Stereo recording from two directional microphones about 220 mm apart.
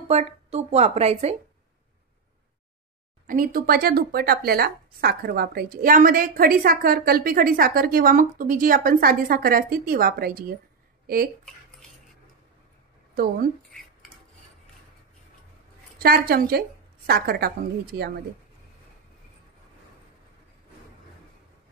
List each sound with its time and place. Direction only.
0.1 s a woman's voice: 30° right (ahead or behind)
3.3 s a woman's voice: 40° right (ahead or behind)
13.1 s a woman's voice: 40° right (ahead or behind)
16.0 s a woman's voice: 45° right (ahead or behind)